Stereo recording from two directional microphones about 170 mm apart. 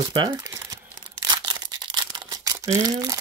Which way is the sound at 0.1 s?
25° right (ahead or behind).